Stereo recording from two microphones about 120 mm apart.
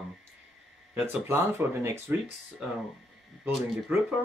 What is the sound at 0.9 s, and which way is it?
Speech, 15° right (ahead or behind).